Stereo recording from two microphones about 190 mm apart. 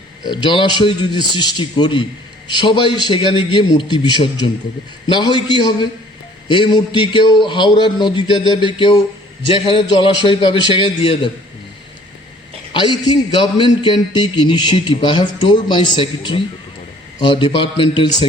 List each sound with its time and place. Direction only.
0.2 s a man's voice: 25° left (ahead or behind)
12.7 s a man's voice: 25° left (ahead or behind)